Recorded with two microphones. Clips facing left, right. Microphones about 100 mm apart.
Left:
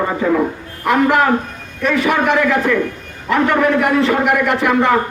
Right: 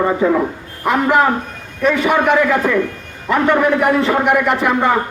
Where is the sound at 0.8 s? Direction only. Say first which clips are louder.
Even; 25° right (ahead or behind).